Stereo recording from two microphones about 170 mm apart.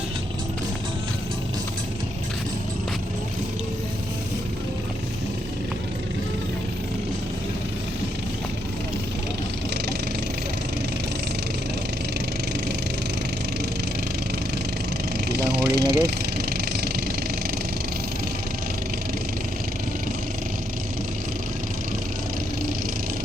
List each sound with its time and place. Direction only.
15.6 s engine: 70° right (ahead or behind)